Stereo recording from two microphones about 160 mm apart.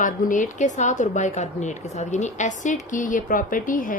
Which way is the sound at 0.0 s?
55° left (ahead or behind).